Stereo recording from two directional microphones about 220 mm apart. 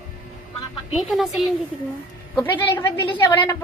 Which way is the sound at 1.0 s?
Centre (ahead or behind).